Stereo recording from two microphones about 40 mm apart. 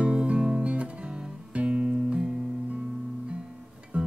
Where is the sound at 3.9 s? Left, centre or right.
Right.